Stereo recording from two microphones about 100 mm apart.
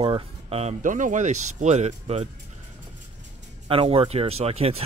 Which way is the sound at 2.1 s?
90° right.